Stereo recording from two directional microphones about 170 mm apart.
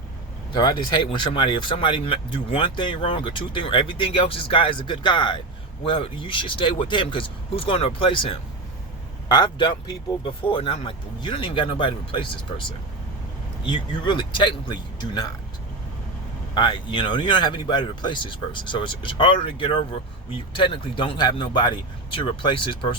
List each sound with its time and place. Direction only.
0.5 s speech: 25° left (ahead or behind)
13.7 s speech: 30° left (ahead or behind)
16.6 s speech: 30° left (ahead or behind)